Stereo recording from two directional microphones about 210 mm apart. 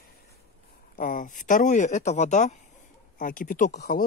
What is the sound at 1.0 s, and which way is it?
Speech, 40° left (ahead or behind).